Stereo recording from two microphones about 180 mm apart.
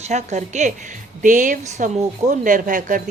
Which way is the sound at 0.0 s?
40° right (ahead or behind).